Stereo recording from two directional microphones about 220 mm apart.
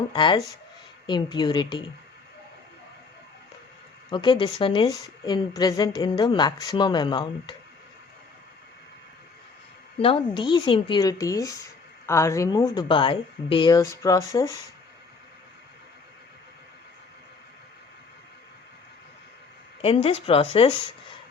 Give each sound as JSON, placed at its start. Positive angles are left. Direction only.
{"t": 0.1, "sound": "a woman's voice", "side_deg": 20}
{"t": 4.1, "sound": "a woman's voice", "side_deg": 20}
{"t": 10.0, "sound": "a woman's voice", "side_deg": 25}
{"t": 19.8, "sound": "a woman's voice", "side_deg": 25}